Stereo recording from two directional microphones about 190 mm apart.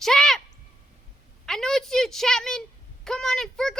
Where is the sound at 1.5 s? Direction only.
Centre (ahead or behind).